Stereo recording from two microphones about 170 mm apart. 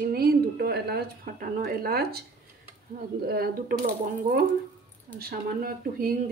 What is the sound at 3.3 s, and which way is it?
A woman's voice, 60° right (ahead or behind).